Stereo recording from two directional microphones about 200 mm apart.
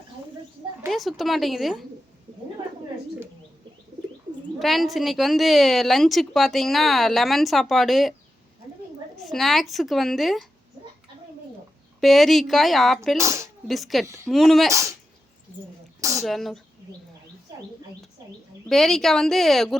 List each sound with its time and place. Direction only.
0.9 s a woman's voice: centre (ahead or behind)
4.6 s a woman's voice: centre (ahead or behind)
9.1 s a woman's voice: centre (ahead or behind)
11.9 s a woman's voice: centre (ahead or behind)
13.1 s speech: 15° right (ahead or behind)
13.7 s a woman's voice: centre (ahead or behind)
14.7 s speech: 15° right (ahead or behind)
16.0 s speech: 15° right (ahead or behind)
16.2 s a woman's voice: centre (ahead or behind)
17.5 s a sound: 15° right (ahead or behind)
18.0 s speech: 5° left (ahead or behind)